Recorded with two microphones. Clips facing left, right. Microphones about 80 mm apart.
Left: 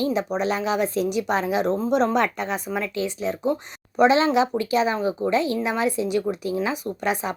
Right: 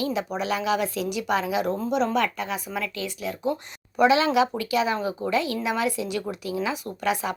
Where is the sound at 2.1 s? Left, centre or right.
Left.